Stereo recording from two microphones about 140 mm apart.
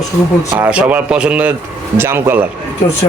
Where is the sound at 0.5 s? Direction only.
10° right (ahead or behind).